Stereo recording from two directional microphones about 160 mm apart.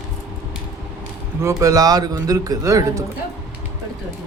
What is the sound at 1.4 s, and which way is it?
Speech, 20° right (ahead or behind).